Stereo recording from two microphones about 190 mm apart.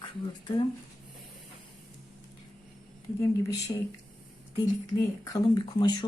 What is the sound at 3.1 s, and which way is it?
Speech, 15° left (ahead or behind).